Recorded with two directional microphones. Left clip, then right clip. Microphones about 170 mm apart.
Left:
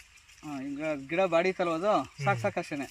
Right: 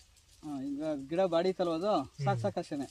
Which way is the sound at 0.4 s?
20° left (ahead or behind).